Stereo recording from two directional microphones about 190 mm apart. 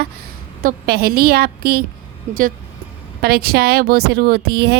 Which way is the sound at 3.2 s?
55° right (ahead or behind).